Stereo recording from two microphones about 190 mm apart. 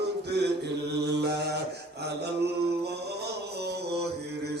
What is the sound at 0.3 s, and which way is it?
Mantra, 60° right (ahead or behind).